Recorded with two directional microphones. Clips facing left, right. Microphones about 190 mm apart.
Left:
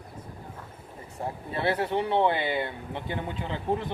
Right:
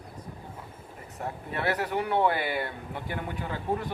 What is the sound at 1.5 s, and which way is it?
Speech, 25° left (ahead or behind).